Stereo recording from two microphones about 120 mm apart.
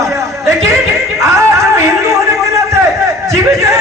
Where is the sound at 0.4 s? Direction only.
25° right (ahead or behind).